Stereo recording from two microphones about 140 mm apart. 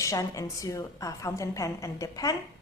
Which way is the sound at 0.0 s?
20° left (ahead or behind).